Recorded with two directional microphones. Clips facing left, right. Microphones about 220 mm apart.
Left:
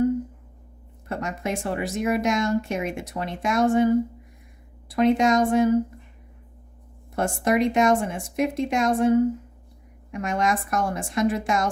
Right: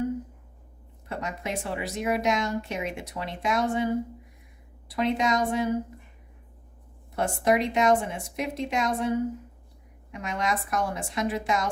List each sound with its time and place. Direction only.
1.0 s speech: 45° left (ahead or behind)
4.9 s speech: 50° left (ahead or behind)
7.2 s speech: 45° left (ahead or behind)